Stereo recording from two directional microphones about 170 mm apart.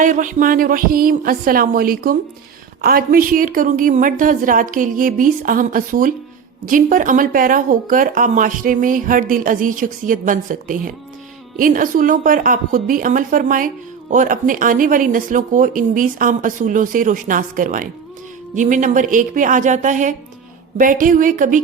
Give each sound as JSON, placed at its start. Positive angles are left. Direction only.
{"t": 0.0, "sound": "speech", "side_deg": -50}